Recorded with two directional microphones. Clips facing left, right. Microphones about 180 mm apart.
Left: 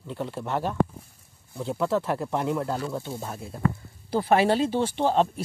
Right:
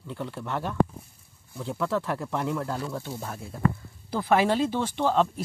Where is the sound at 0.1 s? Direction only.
25° left (ahead or behind).